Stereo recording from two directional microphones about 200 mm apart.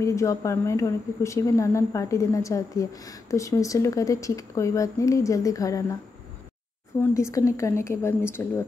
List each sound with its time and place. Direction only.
0.0 s speech: 15° left (ahead or behind)
7.0 s speech: 15° left (ahead or behind)